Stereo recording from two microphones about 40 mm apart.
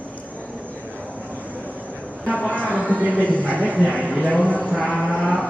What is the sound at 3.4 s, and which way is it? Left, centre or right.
Speech, right.